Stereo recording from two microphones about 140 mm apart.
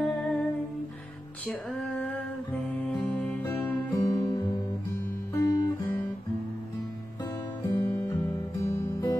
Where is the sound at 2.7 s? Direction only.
10° left (ahead or behind).